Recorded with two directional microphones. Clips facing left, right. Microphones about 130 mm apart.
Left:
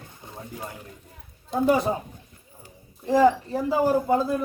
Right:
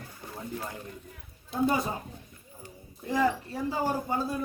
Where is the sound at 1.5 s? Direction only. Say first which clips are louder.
Left 6 dB; 80° left.